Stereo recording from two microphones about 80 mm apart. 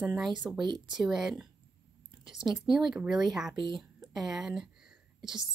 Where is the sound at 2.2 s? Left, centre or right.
Right.